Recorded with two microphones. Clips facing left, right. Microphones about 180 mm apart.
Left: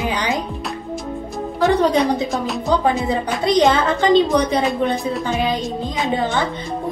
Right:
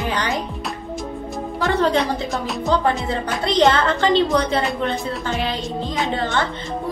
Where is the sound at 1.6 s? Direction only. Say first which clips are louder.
Left 3 dB; 15° left (ahead or behind).